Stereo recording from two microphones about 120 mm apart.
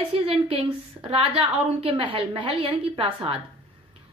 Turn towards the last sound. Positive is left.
turn(degrees=-50)  # may be behind; listen again after turning